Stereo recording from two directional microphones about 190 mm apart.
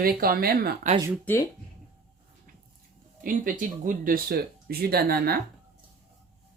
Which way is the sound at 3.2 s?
45° right (ahead or behind).